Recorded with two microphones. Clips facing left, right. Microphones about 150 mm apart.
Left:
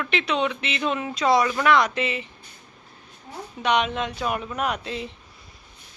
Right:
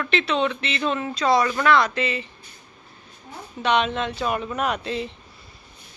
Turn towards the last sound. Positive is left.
turn(degrees=5)  # may be behind; listen again after turning